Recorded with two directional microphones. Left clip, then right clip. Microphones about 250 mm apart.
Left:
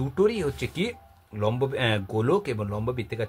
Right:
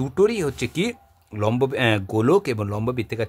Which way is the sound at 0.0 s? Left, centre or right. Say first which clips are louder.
Right 4 dB; right.